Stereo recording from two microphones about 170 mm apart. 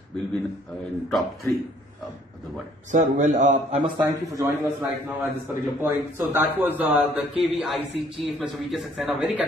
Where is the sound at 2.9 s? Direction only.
50° right (ahead or behind).